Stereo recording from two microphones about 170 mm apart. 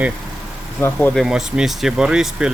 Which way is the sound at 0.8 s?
15° left (ahead or behind).